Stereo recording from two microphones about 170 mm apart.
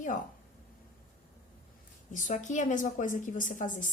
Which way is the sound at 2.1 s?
50° left (ahead or behind).